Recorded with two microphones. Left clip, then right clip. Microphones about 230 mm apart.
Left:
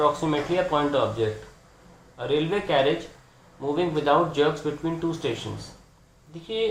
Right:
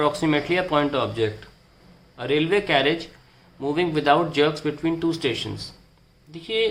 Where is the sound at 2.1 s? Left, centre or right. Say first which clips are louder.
Right 4 dB; right.